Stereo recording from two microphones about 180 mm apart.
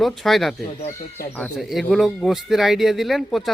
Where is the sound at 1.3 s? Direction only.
5° left (ahead or behind).